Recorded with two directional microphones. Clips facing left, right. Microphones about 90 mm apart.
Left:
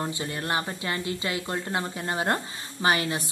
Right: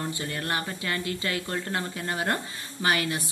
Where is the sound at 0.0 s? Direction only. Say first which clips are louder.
Left 1 dB; 20° left (ahead or behind).